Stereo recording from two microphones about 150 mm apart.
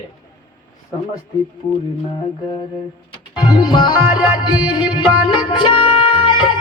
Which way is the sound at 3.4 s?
30° left (ahead or behind).